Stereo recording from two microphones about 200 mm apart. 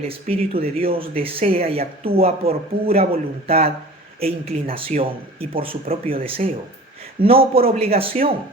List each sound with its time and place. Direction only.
0.1 s speech: 30° right (ahead or behind)